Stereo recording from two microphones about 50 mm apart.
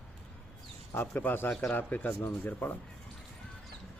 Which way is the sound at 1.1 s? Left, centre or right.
Left.